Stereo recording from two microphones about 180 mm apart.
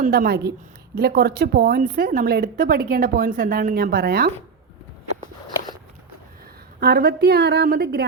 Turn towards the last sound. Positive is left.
turn(degrees=-60)  # may be behind; listen again after turning